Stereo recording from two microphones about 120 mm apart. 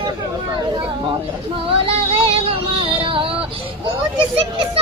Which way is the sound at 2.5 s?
50° right (ahead or behind).